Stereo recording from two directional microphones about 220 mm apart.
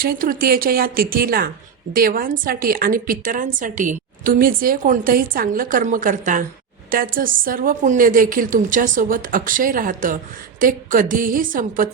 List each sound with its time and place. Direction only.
0.0 s a woman's voice: 40° right (ahead or behind)